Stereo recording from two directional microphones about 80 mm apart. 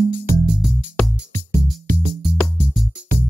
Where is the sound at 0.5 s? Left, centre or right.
Centre.